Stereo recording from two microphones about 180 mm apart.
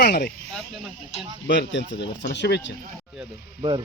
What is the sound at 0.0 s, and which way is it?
Speech, 60° left (ahead or behind).